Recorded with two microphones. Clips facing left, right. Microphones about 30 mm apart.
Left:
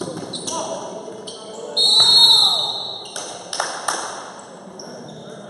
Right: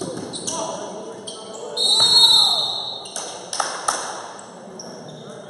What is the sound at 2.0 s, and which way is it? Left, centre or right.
Basketball bounce, centre.